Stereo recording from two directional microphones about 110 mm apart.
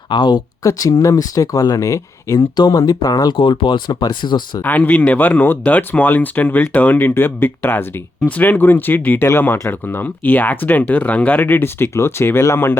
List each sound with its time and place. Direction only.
0.1 s speech: 45° left (ahead or behind)
0.6 s speech: 30° left (ahead or behind)
4.6 s speech: 15° left (ahead or behind)